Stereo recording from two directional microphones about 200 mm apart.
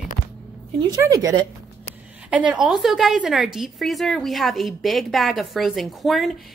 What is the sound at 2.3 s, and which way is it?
A woman's voice, 5° right (ahead or behind).